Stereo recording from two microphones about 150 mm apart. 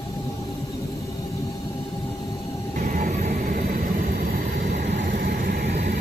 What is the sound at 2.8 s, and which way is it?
Vehicle, 65° right (ahead or behind).